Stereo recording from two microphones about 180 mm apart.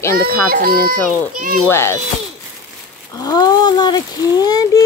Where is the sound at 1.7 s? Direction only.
15° left (ahead or behind).